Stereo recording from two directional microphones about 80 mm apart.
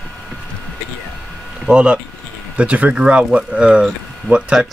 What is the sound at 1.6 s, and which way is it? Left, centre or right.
Speech, centre.